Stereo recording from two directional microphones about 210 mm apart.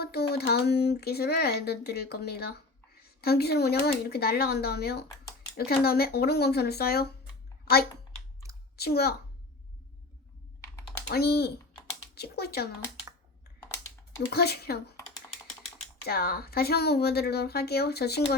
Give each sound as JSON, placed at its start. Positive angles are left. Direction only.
{"t": 0.0, "sound": "a child's voice", "side_deg": 50}
{"t": 11.1, "sound": "a child's voice", "side_deg": 50}
{"t": 14.2, "sound": "speech", "side_deg": 50}
{"t": 16.0, "sound": "speech", "side_deg": 45}